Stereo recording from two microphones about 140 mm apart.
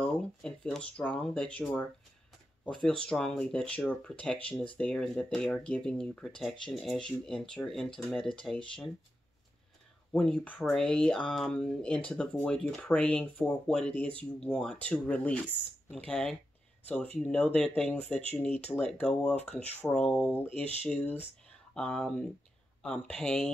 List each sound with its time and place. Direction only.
0.0 s speech: 5° left (ahead or behind)
10.1 s speech: 5° left (ahead or behind)